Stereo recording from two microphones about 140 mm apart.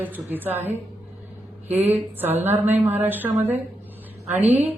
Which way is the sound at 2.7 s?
50° right (ahead or behind).